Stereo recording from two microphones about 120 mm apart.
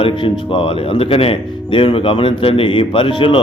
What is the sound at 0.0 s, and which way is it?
Speech, 45° left (ahead or behind).